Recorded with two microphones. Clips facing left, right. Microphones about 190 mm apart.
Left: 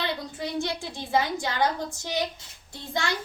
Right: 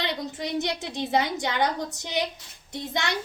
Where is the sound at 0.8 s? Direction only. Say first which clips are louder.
Right 1 dB; 20° right (ahead or behind).